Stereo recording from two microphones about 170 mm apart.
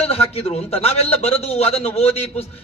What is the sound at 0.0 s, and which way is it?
A man's voice, 35° left (ahead or behind).